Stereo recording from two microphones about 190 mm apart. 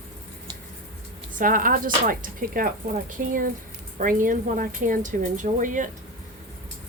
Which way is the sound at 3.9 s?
45° right (ahead or behind).